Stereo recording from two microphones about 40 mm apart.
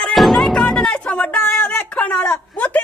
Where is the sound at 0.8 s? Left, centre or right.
Left.